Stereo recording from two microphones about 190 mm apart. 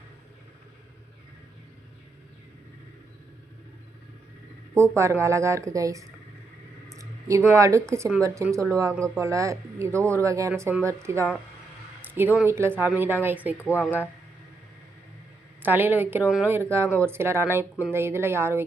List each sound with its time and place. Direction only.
4.7 s speech: 15° right (ahead or behind)
12.0 s a sound: 10° right (ahead or behind)
12.4 s speech: 15° right (ahead or behind)
13.6 s a woman's voice: 10° left (ahead or behind)
15.6 s speech: 10° right (ahead or behind)